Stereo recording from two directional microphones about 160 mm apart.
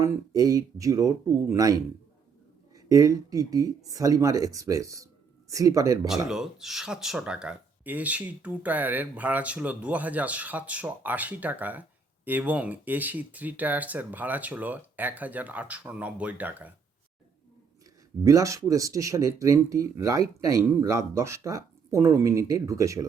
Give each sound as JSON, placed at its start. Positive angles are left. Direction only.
{"t": 0.0, "sound": "speech", "side_deg": -25}
{"t": 6.1, "sound": "speech", "side_deg": -5}
{"t": 18.2, "sound": "speech", "side_deg": -20}